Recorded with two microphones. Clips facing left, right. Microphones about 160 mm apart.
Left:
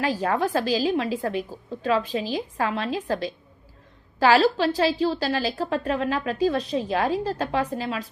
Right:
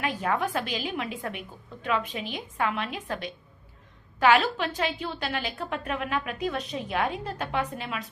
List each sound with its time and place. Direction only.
0.0 s a woman's voice: 30° left (ahead or behind)